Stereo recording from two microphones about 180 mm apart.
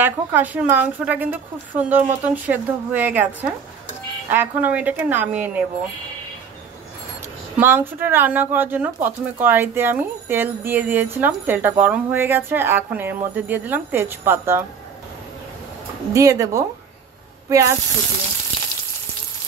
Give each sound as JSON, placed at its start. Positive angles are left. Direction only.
{"t": 0.0, "sound": "speech", "side_deg": -10}
{"t": 7.5, "sound": "speech", "side_deg": -10}
{"t": 16.1, "sound": "speech", "side_deg": -20}